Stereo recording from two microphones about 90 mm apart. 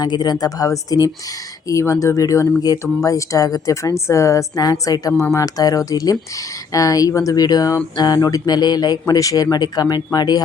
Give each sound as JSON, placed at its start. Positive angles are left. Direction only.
{"t": 0.0, "sound": "speech", "side_deg": 50}
{"t": 4.6, "sound": "speech", "side_deg": 45}
{"t": 5.2, "sound": "speech", "side_deg": 35}
{"t": 7.4, "sound": "speech", "side_deg": 45}